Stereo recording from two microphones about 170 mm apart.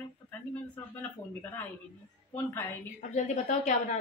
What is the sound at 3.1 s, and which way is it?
Speech, 45° left (ahead or behind).